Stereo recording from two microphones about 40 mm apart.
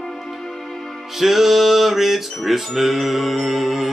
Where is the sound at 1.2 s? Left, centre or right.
Centre.